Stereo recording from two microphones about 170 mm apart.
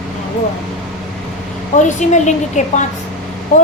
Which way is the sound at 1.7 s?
45° left (ahead or behind).